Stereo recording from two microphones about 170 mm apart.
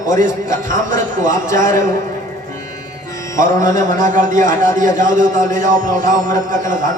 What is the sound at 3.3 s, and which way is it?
A man's voice, 50° right (ahead or behind).